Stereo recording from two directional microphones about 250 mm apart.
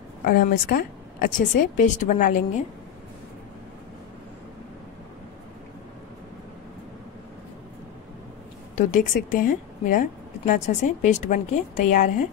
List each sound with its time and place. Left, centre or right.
0.2 s a woman's voice: left
8.7 s a woman's voice: left